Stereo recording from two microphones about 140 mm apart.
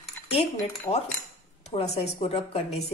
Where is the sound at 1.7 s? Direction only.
50° left (ahead or behind).